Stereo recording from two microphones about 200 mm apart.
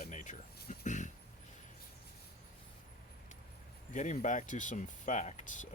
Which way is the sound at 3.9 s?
35° left (ahead or behind).